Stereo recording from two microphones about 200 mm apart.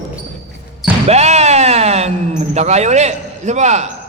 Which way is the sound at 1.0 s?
35° right (ahead or behind).